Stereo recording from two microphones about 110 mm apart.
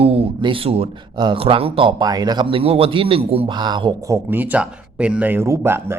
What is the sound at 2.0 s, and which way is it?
Speech, 40° right (ahead or behind).